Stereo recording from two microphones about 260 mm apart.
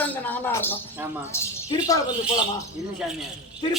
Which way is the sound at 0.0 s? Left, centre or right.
Centre.